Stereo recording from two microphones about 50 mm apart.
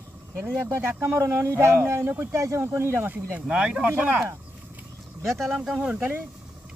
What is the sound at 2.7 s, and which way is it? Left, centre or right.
Speech, right.